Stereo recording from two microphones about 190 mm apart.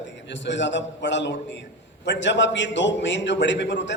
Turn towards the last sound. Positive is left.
turn(degrees=65)  # may be behind; listen again after turning